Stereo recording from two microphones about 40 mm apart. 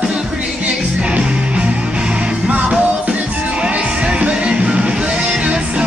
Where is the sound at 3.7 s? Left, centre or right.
Right.